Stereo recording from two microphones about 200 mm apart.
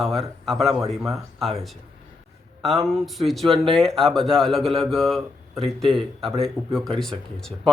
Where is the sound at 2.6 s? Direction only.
Centre (ahead or behind).